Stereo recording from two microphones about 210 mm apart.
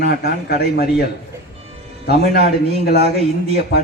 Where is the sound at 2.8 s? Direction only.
50° left (ahead or behind).